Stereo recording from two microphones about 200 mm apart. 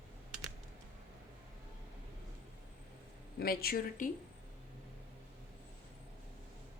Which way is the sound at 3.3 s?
50° left (ahead or behind).